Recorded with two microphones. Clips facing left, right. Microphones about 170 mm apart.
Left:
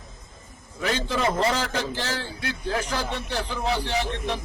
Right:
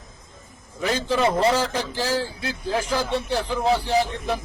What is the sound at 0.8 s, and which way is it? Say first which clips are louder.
Speech: right 4 dB; 30° right (ahead or behind).